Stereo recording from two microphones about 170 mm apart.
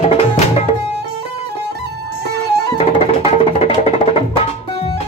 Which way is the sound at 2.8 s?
35° left (ahead or behind).